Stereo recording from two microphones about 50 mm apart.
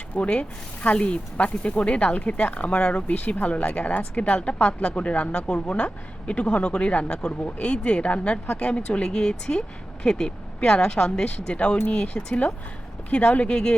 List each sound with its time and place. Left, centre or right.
0.2 s speech: left